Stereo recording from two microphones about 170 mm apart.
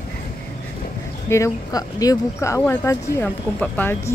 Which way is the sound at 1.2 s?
15° left (ahead or behind).